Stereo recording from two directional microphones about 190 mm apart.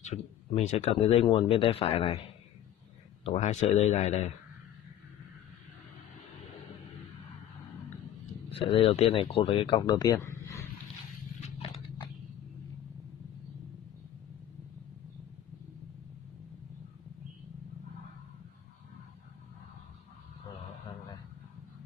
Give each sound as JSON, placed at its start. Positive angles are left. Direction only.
{"t": 0.0, "sound": "speech", "side_deg": 35}
{"t": 3.3, "sound": "speech", "side_deg": 35}
{"t": 8.5, "sound": "speech", "side_deg": 30}
{"t": 11.4, "sound": "biting", "side_deg": 30}